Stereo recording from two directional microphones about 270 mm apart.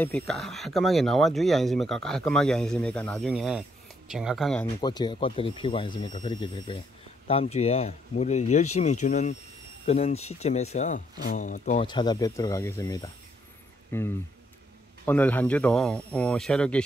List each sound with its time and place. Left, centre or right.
0.0 s speech: centre
4.8 s speech: centre
11.9 s speech: centre